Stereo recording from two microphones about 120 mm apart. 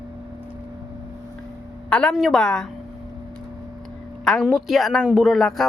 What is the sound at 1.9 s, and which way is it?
Speech, 5° left (ahead or behind).